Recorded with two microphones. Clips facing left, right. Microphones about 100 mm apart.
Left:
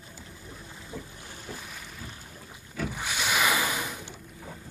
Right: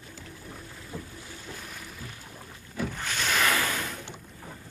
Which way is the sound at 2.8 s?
10° left (ahead or behind).